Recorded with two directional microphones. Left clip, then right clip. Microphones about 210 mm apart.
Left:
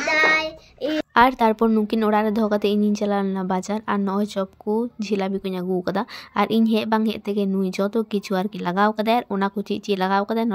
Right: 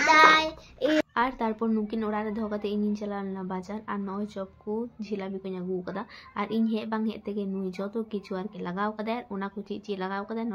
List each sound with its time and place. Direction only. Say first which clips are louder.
0.1 s child singing: even; 5° left (ahead or behind)
0.8 s a sound: even; 15° left (ahead or behind)
1.1 s a woman's voice: left 11 dB; 50° left (ahead or behind)